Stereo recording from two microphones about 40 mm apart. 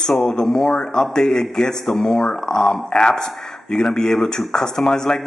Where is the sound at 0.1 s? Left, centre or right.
Centre.